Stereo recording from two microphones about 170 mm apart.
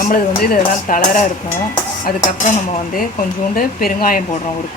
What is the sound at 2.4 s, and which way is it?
Speech, 45° left (ahead or behind).